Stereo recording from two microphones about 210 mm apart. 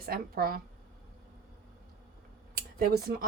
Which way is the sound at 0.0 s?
45° right (ahead or behind).